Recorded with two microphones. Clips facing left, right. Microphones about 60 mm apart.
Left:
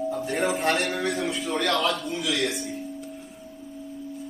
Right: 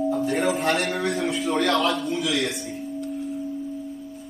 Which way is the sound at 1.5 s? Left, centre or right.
Right.